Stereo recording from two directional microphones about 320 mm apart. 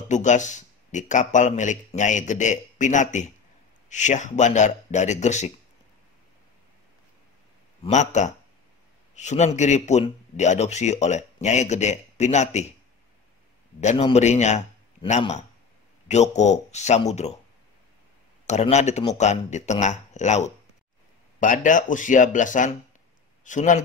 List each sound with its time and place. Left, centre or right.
0.1 s a man's voice: left
7.8 s a man's voice: left
13.7 s a man's voice: centre
18.5 s a man's voice: left